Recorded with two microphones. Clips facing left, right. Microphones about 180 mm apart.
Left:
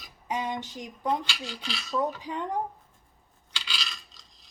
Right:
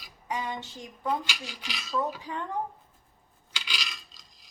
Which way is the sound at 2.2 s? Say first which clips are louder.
Left 2 dB; 20° left (ahead or behind).